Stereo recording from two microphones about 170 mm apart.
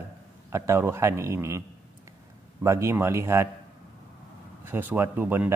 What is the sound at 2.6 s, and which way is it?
Speech, 15° right (ahead or behind).